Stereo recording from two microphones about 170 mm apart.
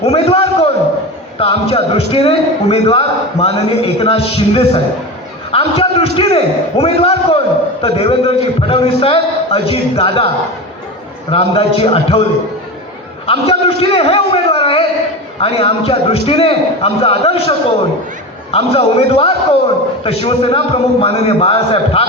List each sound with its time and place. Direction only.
0.0 s a sound: 35° left (ahead or behind)
1.4 s a man's voice: 35° left (ahead or behind)
11.3 s a man's voice: 35° left (ahead or behind)
13.2 s a man's voice: 35° left (ahead or behind)
18.5 s a man's voice: 35° left (ahead or behind)